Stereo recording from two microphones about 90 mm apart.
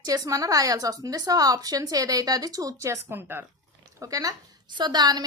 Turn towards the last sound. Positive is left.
turn(degrees=-50)  # may be behind; listen again after turning